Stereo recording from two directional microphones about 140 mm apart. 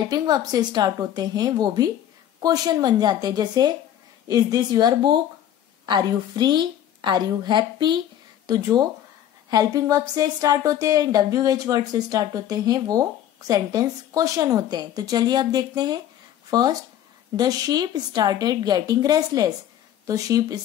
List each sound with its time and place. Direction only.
0.1 s a woman's voice: 25° right (ahead or behind)